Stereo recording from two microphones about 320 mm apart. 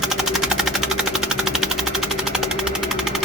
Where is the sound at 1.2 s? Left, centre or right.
Centre.